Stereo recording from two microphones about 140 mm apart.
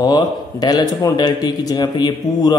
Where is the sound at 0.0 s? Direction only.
30° left (ahead or behind).